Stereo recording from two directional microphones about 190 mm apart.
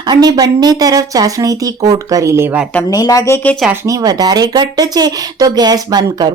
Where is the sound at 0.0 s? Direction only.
20° right (ahead or behind).